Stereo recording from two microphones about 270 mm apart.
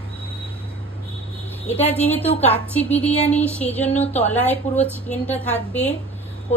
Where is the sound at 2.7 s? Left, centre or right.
Centre.